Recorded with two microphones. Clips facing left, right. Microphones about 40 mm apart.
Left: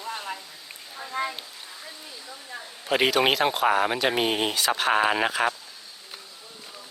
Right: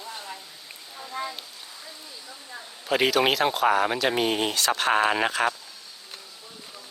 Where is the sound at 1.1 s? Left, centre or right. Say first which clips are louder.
Left 3 dB; left.